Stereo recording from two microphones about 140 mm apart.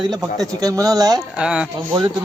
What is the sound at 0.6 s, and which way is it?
Speech, 25° right (ahead or behind).